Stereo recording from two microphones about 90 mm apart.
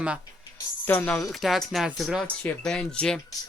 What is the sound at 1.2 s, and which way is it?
Speech, centre (ahead or behind).